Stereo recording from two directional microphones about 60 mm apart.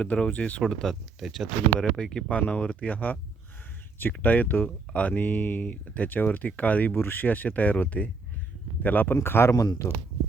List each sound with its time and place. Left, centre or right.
0.0 s speech: centre
0.7 s speech: centre; by 9.1 s left
9.1 s speech: left
9.5 s speech: left